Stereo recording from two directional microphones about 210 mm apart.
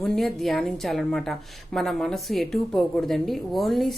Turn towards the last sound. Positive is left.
turn(degrees=0)  # may be behind; listen again after turning